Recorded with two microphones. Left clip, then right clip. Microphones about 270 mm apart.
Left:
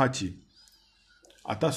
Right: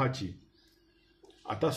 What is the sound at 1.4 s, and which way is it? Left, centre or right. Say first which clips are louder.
Speech: left 3 dB; left.